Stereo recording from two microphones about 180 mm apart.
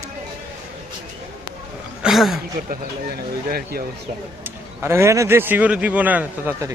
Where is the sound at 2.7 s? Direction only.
55° right (ahead or behind).